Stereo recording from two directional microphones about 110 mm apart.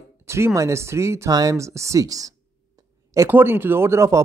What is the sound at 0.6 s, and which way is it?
Speech, 25° right (ahead or behind).